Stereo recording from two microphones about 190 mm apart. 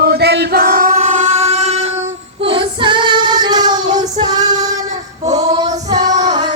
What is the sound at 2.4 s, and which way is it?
Female singing, 25° right (ahead or behind).